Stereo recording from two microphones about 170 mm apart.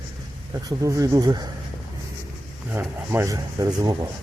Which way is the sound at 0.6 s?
20° right (ahead or behind).